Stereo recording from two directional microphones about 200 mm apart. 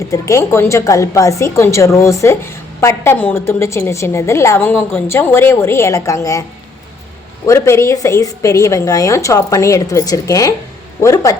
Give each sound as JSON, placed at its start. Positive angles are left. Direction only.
{"t": 0.1, "sound": "a woman's voice", "side_deg": 15}
{"t": 7.4, "sound": "a woman's voice", "side_deg": 15}